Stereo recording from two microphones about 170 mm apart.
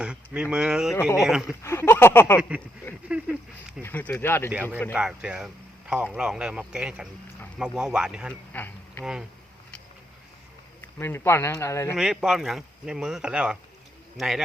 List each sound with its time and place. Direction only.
0.0 s speech: 5° right (ahead or behind)
1.6 s speech: 15° left (ahead or behind)
3.1 s a sound: 5° right (ahead or behind)
3.8 s speech: 10° left (ahead or behind)
4.9 s speech: 5° right (ahead or behind)
8.5 s a sound: 10° left (ahead or behind)
10.8 s speech: 15° left (ahead or behind)
11.9 s speech: 5° right (ahead or behind)